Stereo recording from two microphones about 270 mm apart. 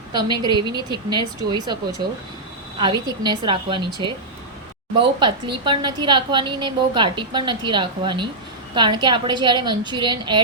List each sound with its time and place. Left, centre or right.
0.1 s a woman's voice: centre
5.2 s a woman's voice: centre